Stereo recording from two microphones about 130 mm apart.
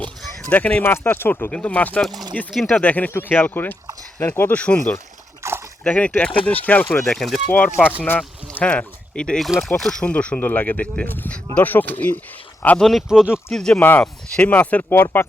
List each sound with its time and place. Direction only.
0.0 s speech: 10° left (ahead or behind)
5.4 s a sound: 20° right (ahead or behind)
5.8 s speech: 10° left (ahead or behind)
12.9 s speech: centre (ahead or behind); by 15.2 s 15° left (ahead or behind)